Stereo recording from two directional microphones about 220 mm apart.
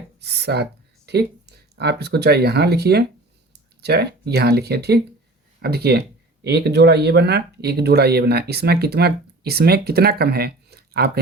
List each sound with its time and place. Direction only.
0.2 s speech: 50° right (ahead or behind)